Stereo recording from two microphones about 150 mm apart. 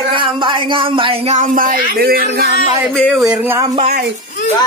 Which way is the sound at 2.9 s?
5° left (ahead or behind).